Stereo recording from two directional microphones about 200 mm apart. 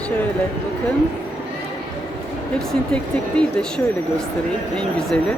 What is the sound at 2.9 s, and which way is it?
Speech, 5° left (ahead or behind).